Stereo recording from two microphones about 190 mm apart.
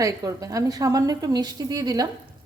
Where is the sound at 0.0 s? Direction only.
20° right (ahead or behind).